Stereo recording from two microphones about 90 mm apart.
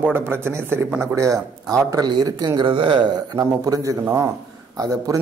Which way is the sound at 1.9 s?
50° right (ahead or behind).